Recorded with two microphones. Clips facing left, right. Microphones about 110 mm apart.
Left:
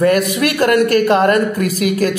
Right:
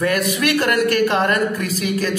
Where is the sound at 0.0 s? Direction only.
50° left (ahead or behind).